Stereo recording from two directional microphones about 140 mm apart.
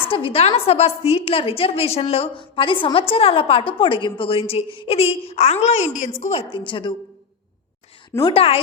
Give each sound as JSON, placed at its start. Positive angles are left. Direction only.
{"t": 0.1, "sound": "a woman's voice", "side_deg": 40}
{"t": 8.3, "sound": "a woman's voice", "side_deg": 45}